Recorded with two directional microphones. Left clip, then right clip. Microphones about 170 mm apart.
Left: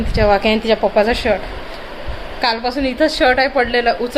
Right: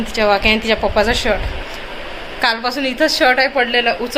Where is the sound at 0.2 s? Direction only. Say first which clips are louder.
Even; 45° left (ahead or behind).